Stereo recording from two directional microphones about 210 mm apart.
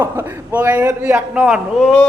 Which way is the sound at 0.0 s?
10° right (ahead or behind).